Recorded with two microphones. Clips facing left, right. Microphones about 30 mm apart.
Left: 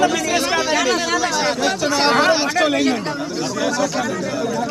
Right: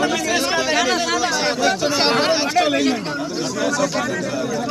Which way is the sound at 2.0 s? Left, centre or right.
Right.